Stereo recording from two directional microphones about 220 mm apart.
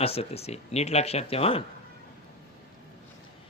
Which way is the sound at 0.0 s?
25° left (ahead or behind).